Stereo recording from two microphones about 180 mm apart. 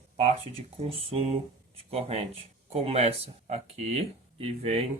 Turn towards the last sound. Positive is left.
turn(degrees=-35)  # may be behind; listen again after turning